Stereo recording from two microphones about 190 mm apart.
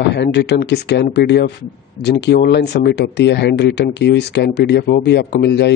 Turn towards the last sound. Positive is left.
turn(degrees=60)  # may be behind; listen again after turning